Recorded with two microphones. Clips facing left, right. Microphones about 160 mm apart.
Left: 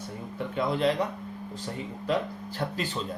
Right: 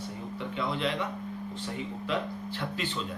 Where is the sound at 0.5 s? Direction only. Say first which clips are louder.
Left 6 dB; 40° left (ahead or behind).